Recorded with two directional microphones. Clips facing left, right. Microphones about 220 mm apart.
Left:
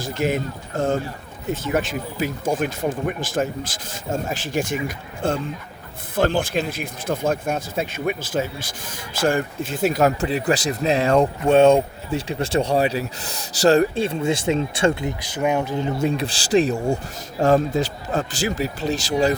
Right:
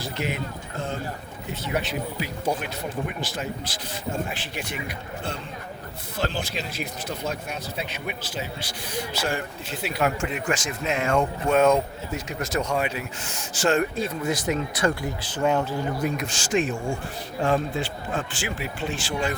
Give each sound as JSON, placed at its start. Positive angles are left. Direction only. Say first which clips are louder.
{"t": 0.0, "sound": "speech", "louder": "left 7 dB", "side_deg": 45}
{"t": 15.4, "sound": "speech", "louder": "left 2 dB", "side_deg": 15}